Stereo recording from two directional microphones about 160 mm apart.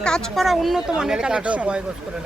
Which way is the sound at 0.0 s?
5° left (ahead or behind).